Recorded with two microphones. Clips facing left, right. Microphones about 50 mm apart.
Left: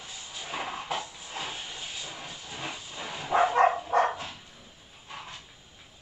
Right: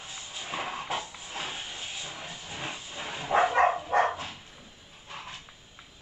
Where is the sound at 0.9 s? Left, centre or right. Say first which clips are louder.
Even; centre.